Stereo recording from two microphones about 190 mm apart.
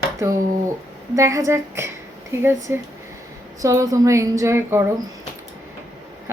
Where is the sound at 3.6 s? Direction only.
15° right (ahead or behind).